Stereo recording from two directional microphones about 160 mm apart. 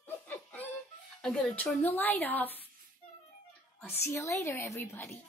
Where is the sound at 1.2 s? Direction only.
5° left (ahead or behind).